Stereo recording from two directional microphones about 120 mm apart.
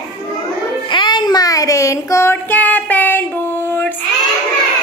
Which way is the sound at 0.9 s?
40° left (ahead or behind).